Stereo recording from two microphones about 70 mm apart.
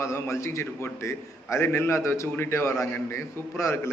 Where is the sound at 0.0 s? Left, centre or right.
Left.